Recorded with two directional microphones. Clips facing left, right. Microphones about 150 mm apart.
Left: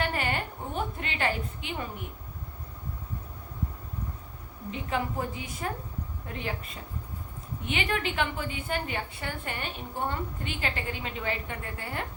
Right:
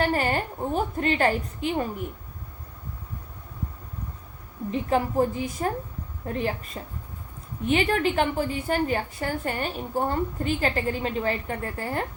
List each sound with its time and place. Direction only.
0.0 s a woman's voice: 40° right (ahead or behind)
4.7 s a woman's voice: 40° right (ahead or behind)